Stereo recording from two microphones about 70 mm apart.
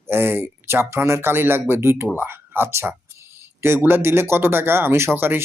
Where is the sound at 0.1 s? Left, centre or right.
Right.